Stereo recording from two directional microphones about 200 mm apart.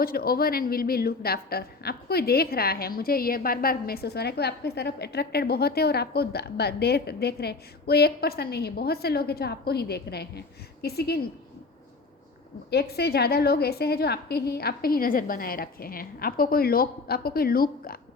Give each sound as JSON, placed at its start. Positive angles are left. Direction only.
{"t": 0.0, "sound": "a woman's voice", "side_deg": 50}
{"t": 12.7, "sound": "a woman's voice", "side_deg": 50}